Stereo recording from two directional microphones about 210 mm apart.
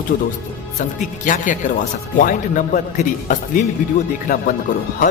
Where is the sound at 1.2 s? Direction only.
40° left (ahead or behind).